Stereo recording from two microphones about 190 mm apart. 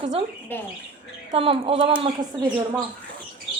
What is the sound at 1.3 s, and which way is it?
A woman's voice, 30° right (ahead or behind).